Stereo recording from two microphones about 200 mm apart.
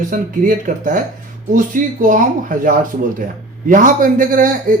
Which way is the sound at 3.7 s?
40° right (ahead or behind).